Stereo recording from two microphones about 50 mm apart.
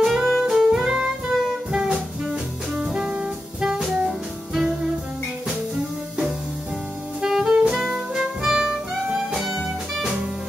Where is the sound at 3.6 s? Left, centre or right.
Centre.